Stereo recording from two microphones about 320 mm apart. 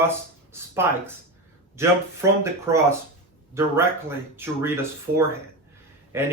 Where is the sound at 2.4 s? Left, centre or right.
Centre.